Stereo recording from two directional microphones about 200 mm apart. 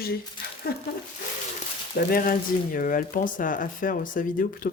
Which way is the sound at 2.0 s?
50° left (ahead or behind).